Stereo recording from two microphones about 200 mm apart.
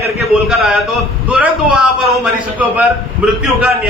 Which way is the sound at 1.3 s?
5° right (ahead or behind).